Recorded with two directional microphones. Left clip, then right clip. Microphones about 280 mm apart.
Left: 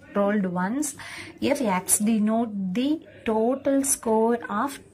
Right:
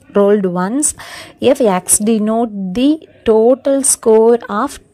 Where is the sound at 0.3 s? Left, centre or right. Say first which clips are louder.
Right 13 dB; right.